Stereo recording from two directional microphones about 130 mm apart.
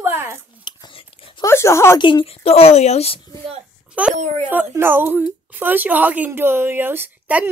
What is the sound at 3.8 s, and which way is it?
Babbling, 10° right (ahead or behind).